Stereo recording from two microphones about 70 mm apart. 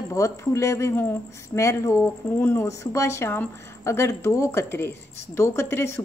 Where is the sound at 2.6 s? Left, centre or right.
Left.